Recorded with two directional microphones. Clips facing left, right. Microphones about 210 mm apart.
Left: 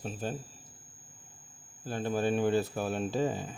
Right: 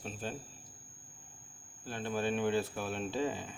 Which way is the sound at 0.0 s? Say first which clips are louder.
Left 5 dB; 40° left (ahead or behind).